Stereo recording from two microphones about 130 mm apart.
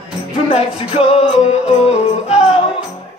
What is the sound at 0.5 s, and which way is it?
Music, 50° left (ahead or behind).